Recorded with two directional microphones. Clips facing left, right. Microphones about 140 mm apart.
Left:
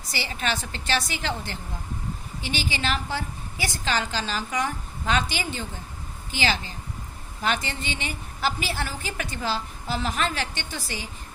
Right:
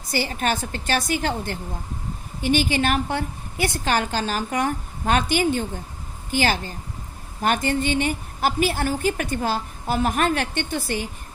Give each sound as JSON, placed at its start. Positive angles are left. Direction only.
{"t": 0.1, "sound": "a woman's voice", "side_deg": -45}